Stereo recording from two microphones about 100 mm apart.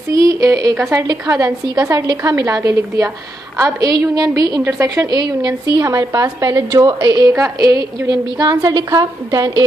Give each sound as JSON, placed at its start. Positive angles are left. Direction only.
{"t": 0.1, "sound": "a woman's voice", "side_deg": -35}